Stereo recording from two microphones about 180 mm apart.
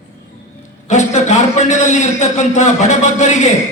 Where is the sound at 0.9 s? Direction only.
40° left (ahead or behind).